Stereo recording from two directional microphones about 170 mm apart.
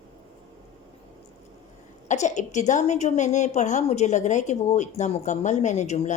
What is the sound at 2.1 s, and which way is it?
A woman's voice, 45° left (ahead or behind).